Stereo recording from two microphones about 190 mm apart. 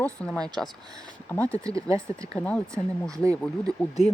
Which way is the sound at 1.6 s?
15° right (ahead or behind).